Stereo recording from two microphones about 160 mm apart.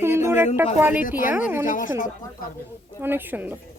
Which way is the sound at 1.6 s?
55° left (ahead or behind).